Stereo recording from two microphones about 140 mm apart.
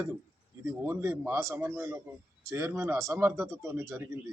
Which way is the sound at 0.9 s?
15° right (ahead or behind).